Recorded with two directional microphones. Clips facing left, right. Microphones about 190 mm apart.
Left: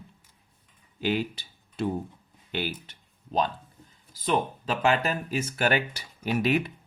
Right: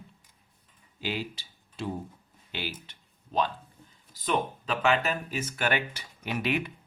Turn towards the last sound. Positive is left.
turn(degrees=40)  # may be behind; listen again after turning